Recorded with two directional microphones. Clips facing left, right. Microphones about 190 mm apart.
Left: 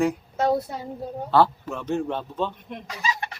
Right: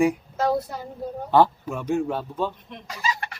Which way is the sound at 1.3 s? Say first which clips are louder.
Right 1 dB; 15° right (ahead or behind).